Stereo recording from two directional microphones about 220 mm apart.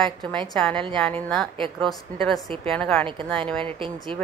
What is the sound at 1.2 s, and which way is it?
A woman's voice, centre (ahead or behind).